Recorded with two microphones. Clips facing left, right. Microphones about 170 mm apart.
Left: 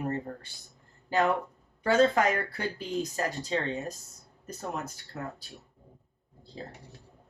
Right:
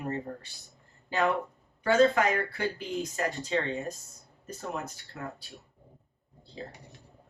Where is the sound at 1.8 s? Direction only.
35° left (ahead or behind).